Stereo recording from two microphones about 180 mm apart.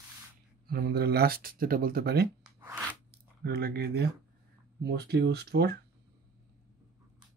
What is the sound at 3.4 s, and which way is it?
Speech, 60° right (ahead or behind).